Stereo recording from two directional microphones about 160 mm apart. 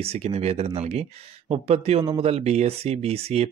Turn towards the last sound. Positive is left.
turn(degrees=-40)  # may be behind; listen again after turning